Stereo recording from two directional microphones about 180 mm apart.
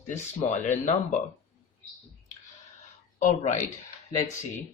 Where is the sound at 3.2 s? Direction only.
45° left (ahead or behind).